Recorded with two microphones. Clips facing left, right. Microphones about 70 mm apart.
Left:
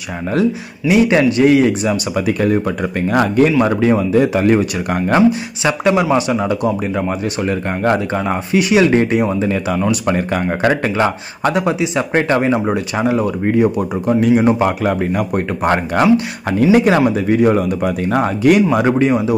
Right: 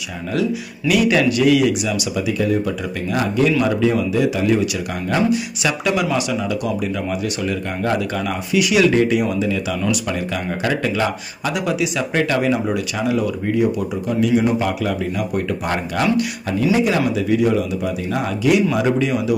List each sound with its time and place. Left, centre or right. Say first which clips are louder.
0.8 s a man's voice: left 4 dB; left
2.1 s speech: left 3 dB; left
3.5 s a man's voice: left 4 dB; left
5.6 s a man's voice: left 9 dB; left